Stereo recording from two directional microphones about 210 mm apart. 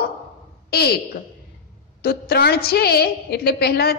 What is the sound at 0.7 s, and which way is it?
Speech, 50° left (ahead or behind).